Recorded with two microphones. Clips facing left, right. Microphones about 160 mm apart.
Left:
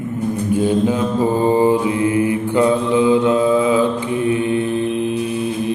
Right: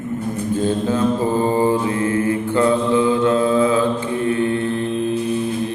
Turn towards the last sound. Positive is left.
turn(degrees=15)  # may be behind; listen again after turning